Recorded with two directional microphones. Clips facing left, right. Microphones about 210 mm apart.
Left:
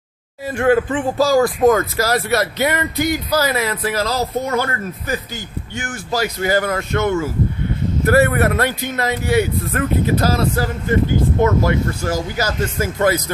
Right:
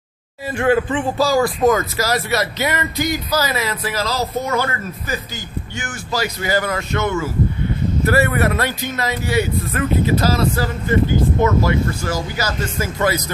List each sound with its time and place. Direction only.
0.6 s speech: 45° left (ahead or behind)